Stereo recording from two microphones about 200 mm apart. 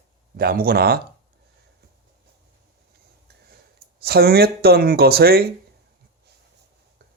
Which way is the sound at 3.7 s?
50° right (ahead or behind).